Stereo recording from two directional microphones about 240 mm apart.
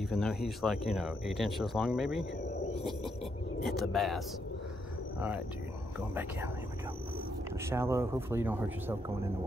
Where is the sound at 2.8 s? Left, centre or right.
Centre.